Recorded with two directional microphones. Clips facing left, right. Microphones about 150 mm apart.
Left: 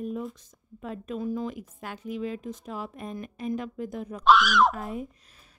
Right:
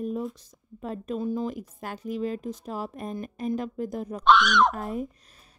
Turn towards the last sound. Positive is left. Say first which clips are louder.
# right 2 dB
turn(degrees=-40)  # may be behind; listen again after turning